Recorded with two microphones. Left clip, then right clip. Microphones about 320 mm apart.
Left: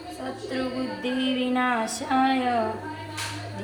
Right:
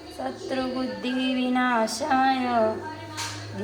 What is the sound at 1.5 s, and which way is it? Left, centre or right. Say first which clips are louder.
A woman's voice: right 4 dB; right.